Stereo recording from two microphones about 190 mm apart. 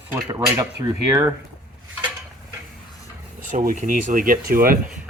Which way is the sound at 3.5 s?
45° right (ahead or behind).